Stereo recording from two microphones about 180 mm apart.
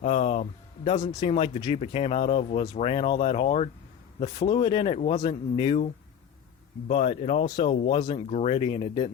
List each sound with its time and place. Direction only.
0.0 s a sound: 35° left (ahead or behind)
0.9 s speech: 30° left (ahead or behind)
6.8 s speech: 35° left (ahead or behind)